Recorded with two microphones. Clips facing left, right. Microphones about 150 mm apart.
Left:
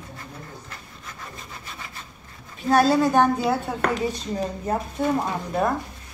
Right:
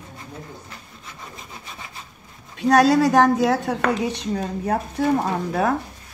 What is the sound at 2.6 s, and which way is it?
A woman's voice, 85° right.